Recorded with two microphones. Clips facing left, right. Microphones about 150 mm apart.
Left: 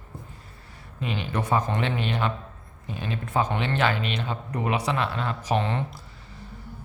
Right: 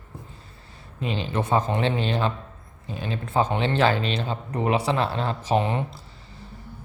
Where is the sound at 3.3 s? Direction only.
25° right (ahead or behind).